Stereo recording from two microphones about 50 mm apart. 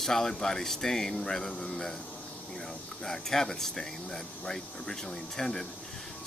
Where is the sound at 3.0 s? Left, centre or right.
Centre.